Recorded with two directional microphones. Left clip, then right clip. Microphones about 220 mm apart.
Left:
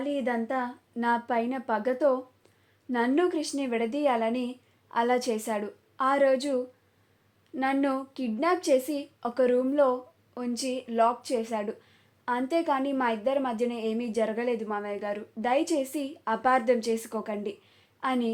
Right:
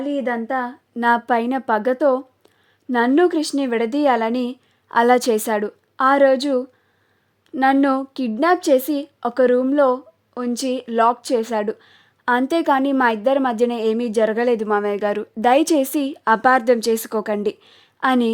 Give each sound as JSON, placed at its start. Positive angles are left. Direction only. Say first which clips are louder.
{"t": 0.0, "sound": "a woman's voice", "louder": "right 7 dB", "side_deg": -40}